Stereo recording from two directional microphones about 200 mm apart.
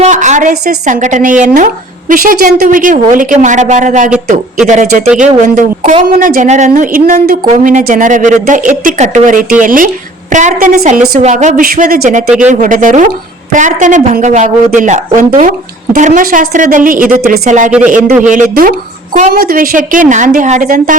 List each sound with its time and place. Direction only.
0.0 s speech: 35° right (ahead or behind)
17.7 s a man's voice: 5° right (ahead or behind)
18.2 s speech: 40° right (ahead or behind)